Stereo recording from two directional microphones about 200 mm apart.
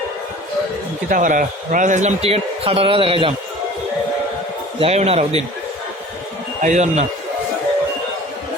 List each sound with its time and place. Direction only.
1.1 s a man's voice: 40° right (ahead or behind); by 3.3 s 25° right (ahead or behind)
4.8 s a man's voice: 30° right (ahead or behind)
6.6 s a man's voice: 35° right (ahead or behind)